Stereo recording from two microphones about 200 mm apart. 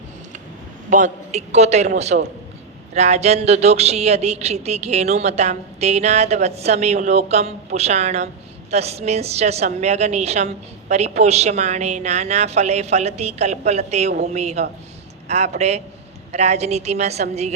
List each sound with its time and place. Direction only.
0.9 s a woman's voice: 40° right (ahead or behind)